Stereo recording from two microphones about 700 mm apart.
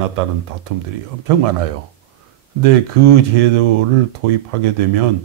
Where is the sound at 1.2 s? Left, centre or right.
Right.